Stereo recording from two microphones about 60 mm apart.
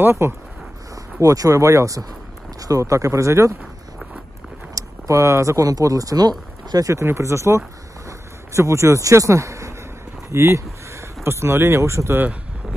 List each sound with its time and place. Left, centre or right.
0.0 s speech: right
1.2 s speech: right
4.7 s a sound: right
5.6 s speech: right
6.7 s speech: right
7.0 s speech: right
10.3 s a sound: right
11.2 s speech: right